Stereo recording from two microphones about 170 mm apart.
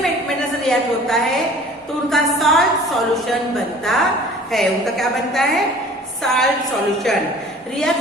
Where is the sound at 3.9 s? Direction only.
Centre (ahead or behind).